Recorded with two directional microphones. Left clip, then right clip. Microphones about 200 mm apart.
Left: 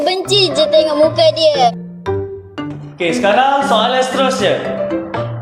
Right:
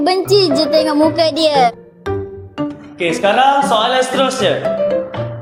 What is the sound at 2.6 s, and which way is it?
Speech, 5° right (ahead or behind).